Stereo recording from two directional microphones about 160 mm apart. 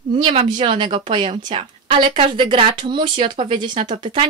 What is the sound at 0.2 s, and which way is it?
Speech, 35° right (ahead or behind).